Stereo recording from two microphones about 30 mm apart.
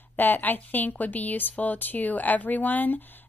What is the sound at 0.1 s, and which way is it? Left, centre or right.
A woman's voice, left.